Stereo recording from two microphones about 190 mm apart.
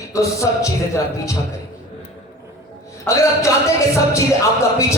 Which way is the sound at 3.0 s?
15° left (ahead or behind).